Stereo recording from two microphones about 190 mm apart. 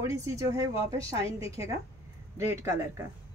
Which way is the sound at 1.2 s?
30° left (ahead or behind).